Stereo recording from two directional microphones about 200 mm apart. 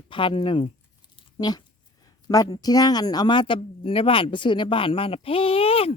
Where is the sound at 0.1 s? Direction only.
25° left (ahead or behind).